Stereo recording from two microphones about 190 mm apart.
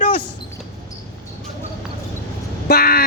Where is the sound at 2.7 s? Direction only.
55° left (ahead or behind).